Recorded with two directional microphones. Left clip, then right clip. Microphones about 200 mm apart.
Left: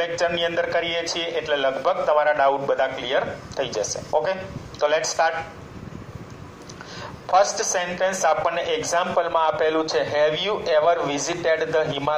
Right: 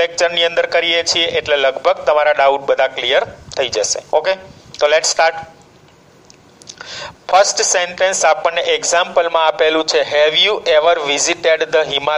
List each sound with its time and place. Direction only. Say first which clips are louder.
0.0 s a man's voice: right 8 dB; 55° right (ahead or behind)
6.7 s a woman's voice: right 8 dB; 55° right (ahead or behind)